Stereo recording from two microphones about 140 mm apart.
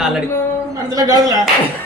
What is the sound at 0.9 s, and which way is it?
Speech, 25° right (ahead or behind).